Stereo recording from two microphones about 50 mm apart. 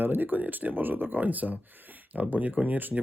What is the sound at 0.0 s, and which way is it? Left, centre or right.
Speech, right.